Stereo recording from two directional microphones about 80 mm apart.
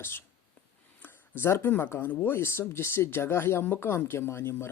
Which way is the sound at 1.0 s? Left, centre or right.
Left.